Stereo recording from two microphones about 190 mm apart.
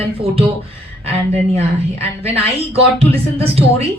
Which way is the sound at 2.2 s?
30° right (ahead or behind).